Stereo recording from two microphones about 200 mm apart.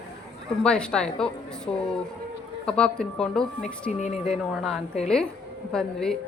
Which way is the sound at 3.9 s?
35° left (ahead or behind).